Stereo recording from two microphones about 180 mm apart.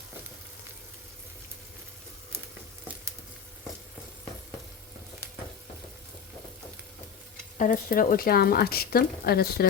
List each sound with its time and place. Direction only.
7.6 s speech: 50° left (ahead or behind)